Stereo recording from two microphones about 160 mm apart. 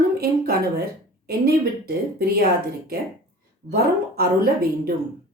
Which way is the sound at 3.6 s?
75° right (ahead or behind).